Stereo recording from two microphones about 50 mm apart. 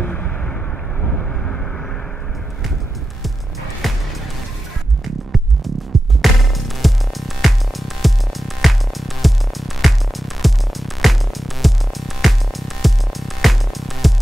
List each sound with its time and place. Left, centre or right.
0.0 s a sound: left
1.1 s vehicle: centre
3.8 s music: centre
5.0 s music: centre